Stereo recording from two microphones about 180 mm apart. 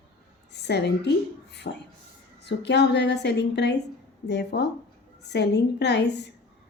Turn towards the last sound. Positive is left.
turn(degrees=70)  # may be behind; listen again after turning